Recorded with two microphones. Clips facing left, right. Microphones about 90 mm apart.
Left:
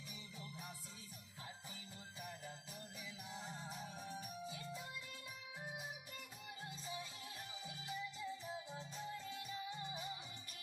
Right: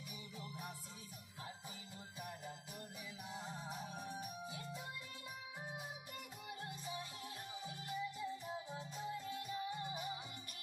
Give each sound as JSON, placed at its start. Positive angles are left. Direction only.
{"t": 3.3, "sound": "music", "side_deg": -15}
{"t": 6.7, "sound": "music", "side_deg": -15}